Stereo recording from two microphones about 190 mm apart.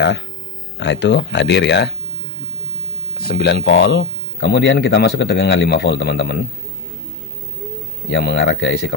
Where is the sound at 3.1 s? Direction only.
50° left (ahead or behind).